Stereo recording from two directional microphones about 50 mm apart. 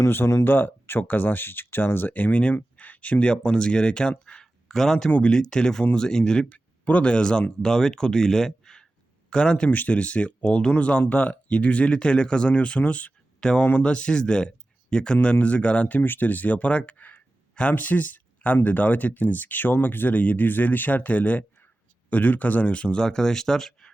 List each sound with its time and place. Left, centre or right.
0.4 s speech: left; by 6.6 s centre
6.8 s speech: left
9.6 s speech: left
13.4 s speech: centre
13.7 s speech: left
16.0 s speech: left
17.5 s a sound: left
17.7 s speech: left; by 23.9 s centre